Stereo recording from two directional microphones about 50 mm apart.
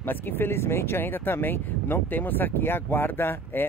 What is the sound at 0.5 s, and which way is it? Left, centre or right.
Speech, left.